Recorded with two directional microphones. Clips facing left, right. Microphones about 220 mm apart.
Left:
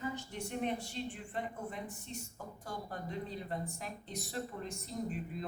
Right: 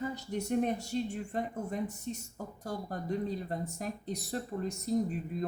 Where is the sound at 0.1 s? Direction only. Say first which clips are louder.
Right 8 dB; 40° right (ahead or behind).